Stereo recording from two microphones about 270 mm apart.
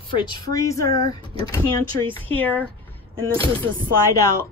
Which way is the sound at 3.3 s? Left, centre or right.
Centre.